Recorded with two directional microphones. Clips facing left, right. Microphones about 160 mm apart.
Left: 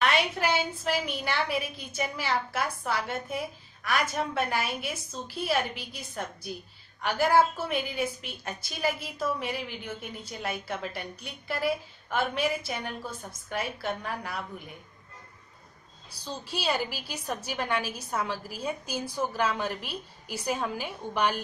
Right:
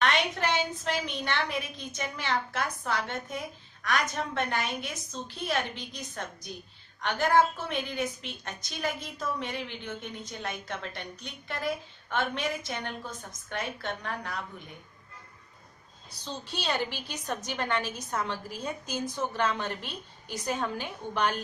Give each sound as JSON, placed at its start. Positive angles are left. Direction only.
{"t": 0.0, "sound": "a woman's voice", "side_deg": 5}
{"t": 16.3, "sound": "a woman's voice", "side_deg": 5}